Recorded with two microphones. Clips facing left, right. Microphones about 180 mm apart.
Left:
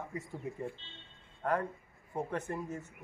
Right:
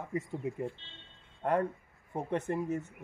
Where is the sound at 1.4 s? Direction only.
25° right (ahead or behind).